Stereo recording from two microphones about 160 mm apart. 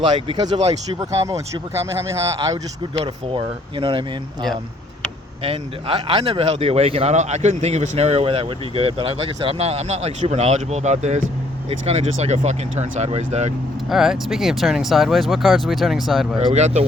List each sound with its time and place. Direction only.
0.3 s a man's voice: 35° right (ahead or behind)
0.9 s speech: 20° right (ahead or behind)
2.9 s a man's voice: 35° right (ahead or behind)
5.4 s a man's voice: 35° right (ahead or behind)
13.9 s speech: centre (ahead or behind)
16.5 s speech: 45° right (ahead or behind)